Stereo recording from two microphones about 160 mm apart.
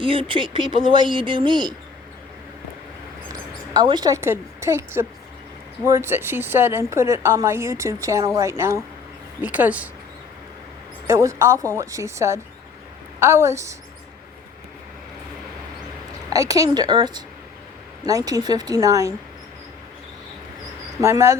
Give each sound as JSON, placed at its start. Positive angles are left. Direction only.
{"t": 0.0, "sound": "speech", "side_deg": -35}
{"t": 3.8, "sound": "a woman's voice", "side_deg": -25}
{"t": 11.0, "sound": "a woman's voice", "side_deg": -20}
{"t": 16.3, "sound": "speech", "side_deg": -20}
{"t": 21.0, "sound": "a woman's voice", "side_deg": -15}